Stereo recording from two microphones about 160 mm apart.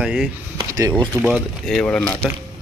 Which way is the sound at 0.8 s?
25° right (ahead or behind).